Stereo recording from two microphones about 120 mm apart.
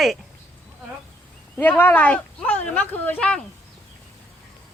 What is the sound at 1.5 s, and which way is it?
Speech, 15° left (ahead or behind).